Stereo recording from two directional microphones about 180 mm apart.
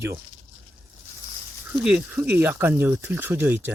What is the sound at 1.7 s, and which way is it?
Speech, 5° right (ahead or behind).